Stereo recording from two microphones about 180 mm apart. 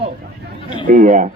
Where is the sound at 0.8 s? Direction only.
45° right (ahead or behind).